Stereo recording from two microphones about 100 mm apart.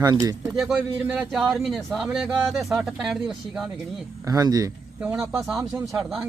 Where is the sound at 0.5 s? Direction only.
5° right (ahead or behind).